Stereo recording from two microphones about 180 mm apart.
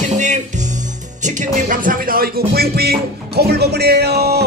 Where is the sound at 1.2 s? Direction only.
45° right (ahead or behind).